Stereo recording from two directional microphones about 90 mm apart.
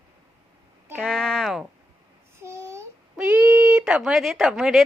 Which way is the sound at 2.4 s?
30° right (ahead or behind).